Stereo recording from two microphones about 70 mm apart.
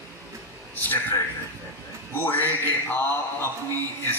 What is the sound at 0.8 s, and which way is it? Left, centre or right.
A man's voice, left.